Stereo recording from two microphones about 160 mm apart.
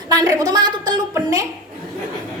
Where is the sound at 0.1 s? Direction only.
25° right (ahead or behind).